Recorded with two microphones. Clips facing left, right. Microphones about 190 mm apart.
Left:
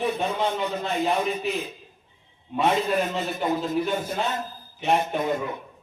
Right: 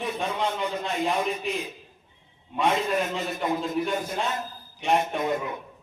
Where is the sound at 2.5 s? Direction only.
5° left (ahead or behind).